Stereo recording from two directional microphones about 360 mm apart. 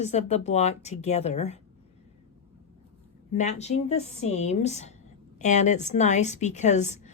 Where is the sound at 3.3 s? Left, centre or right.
Centre.